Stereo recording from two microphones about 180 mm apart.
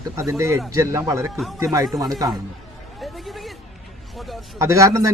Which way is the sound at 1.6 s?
20° right (ahead or behind).